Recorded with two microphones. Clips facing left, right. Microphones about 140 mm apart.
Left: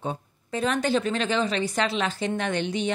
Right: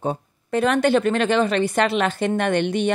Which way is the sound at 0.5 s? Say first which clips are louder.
Right 6 dB; 65° right (ahead or behind).